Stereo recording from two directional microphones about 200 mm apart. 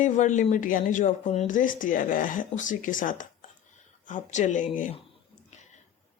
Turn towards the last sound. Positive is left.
turn(degrees=40)  # may be behind; listen again after turning